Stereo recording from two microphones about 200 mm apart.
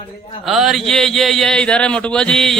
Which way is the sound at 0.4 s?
Centre (ahead or behind).